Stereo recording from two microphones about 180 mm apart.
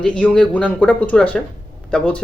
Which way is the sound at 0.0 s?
5° left (ahead or behind).